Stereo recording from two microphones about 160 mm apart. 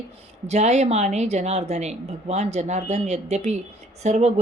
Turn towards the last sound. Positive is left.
turn(degrees=-45)  # may be behind; listen again after turning